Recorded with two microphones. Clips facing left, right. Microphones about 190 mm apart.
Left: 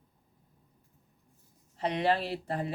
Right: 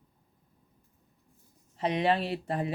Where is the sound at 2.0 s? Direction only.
15° right (ahead or behind).